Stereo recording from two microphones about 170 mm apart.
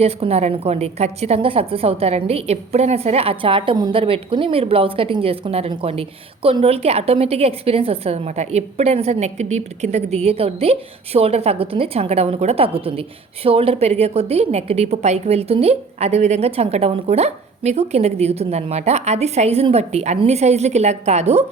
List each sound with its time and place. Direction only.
0.0 s a woman's voice: 35° right (ahead or behind)